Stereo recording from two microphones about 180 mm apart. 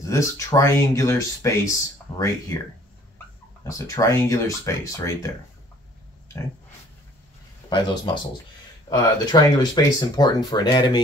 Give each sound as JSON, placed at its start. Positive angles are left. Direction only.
{"t": 0.0, "sound": "speech", "side_deg": 20}
{"t": 3.7, "sound": "speech", "side_deg": 20}
{"t": 7.7, "sound": "speech", "side_deg": 25}